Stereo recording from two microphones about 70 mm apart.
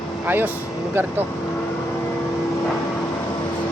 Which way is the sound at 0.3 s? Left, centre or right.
Right.